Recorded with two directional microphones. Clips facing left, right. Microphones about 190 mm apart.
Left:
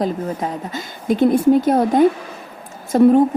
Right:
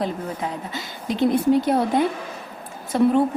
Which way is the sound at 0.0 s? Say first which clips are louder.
Left 5 dB; 45° left (ahead or behind).